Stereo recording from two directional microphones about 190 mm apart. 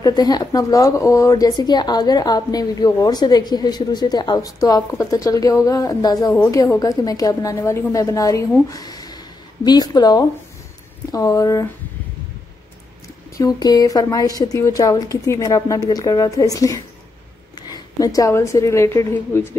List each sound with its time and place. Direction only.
0.0 s a woman's voice: 20° left (ahead or behind)
13.4 s a woman's voice: 20° left (ahead or behind)